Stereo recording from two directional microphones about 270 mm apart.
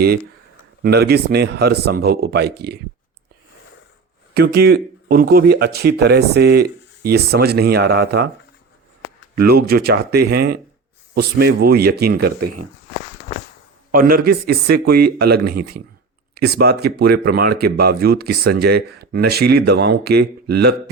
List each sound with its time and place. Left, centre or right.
0.8 s speech: right
4.4 s speech: right
9.4 s speech: right
13.9 s speech: right